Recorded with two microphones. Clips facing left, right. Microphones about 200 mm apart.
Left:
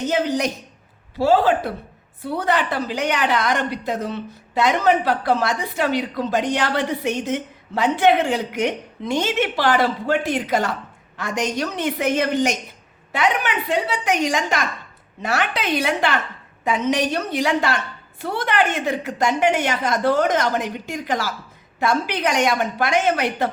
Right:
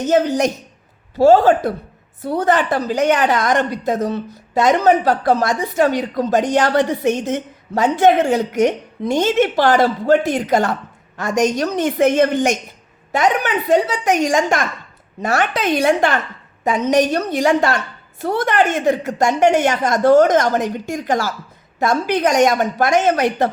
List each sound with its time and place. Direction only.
0.1 s a woman's voice: 45° right (ahead or behind)